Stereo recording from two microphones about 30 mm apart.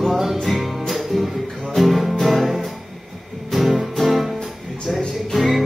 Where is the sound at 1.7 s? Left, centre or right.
Centre.